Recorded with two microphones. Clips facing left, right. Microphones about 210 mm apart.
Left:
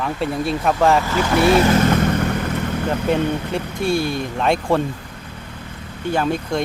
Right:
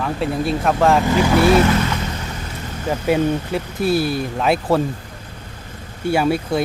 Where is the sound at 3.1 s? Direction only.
5° right (ahead or behind).